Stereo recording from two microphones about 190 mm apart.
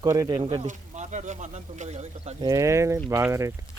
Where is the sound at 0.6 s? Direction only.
40° right (ahead or behind).